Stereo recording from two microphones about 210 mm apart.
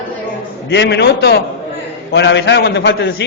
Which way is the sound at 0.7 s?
55° left (ahead or behind).